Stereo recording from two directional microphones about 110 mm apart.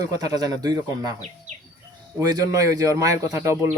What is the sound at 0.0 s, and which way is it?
Speech, 35° right (ahead or behind).